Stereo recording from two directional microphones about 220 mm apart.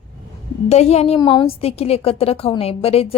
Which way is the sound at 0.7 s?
30° left (ahead or behind).